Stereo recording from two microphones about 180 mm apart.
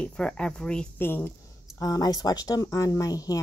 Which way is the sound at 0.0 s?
5° left (ahead or behind).